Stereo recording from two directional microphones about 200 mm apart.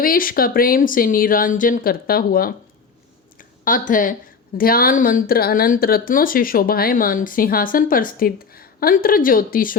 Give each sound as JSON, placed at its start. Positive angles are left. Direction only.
{"t": 0.0, "sound": "speech", "side_deg": 45}
{"t": 3.3, "sound": "a sound", "side_deg": 45}
{"t": 4.5, "sound": "speech", "side_deg": 45}